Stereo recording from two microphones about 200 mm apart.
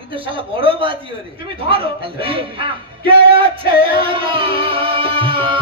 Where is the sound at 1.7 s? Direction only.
30° right (ahead or behind).